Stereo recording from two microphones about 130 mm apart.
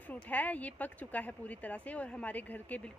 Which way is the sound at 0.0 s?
10° left (ahead or behind).